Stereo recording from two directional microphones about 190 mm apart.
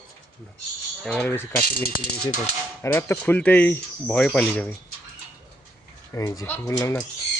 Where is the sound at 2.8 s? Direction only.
10° left (ahead or behind).